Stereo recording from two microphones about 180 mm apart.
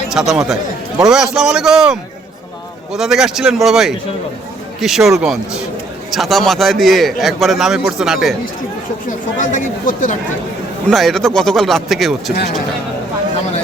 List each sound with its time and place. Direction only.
0.1 s a man's voice: centre (ahead or behind)
9.0 s speech: 45° left (ahead or behind)
10.8 s a man's voice: centre (ahead or behind)